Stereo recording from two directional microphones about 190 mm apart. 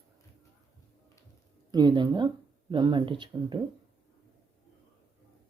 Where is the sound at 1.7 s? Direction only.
20° right (ahead or behind).